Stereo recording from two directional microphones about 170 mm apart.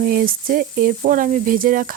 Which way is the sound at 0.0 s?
60° right (ahead or behind).